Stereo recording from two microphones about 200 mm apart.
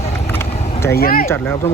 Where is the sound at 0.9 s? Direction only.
45° left (ahead or behind).